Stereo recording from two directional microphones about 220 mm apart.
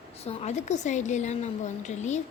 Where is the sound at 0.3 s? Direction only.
30° left (ahead or behind).